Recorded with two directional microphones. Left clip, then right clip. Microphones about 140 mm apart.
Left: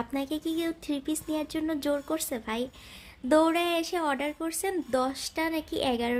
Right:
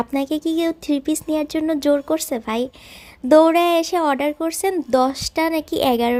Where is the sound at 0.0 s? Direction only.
45° right (ahead or behind).